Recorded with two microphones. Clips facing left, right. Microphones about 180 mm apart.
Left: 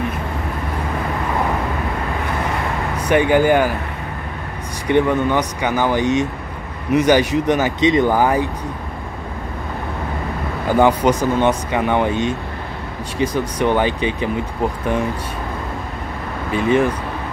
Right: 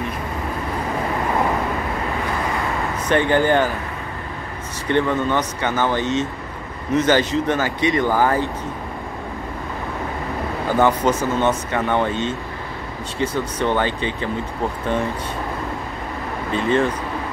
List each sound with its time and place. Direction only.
3.1 s speech: 10° left (ahead or behind)
4.8 s speech: 15° left (ahead or behind)
10.8 s speech: 15° left (ahead or behind)
16.5 s speech: 10° left (ahead or behind)